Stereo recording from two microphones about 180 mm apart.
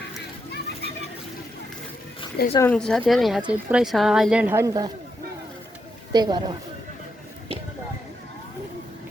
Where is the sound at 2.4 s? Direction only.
60° left (ahead or behind).